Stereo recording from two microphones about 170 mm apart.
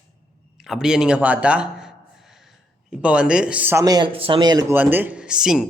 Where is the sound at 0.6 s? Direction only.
5° right (ahead or behind).